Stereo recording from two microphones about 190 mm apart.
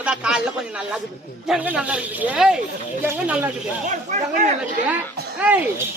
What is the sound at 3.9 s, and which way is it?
Speech, 40° right (ahead or behind).